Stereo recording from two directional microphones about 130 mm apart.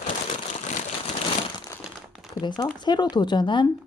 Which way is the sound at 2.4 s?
35° left (ahead or behind).